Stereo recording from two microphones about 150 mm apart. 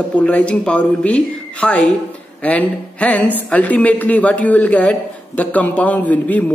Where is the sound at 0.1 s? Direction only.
10° left (ahead or behind).